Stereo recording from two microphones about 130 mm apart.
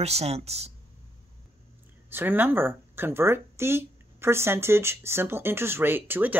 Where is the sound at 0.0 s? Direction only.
55° right (ahead or behind).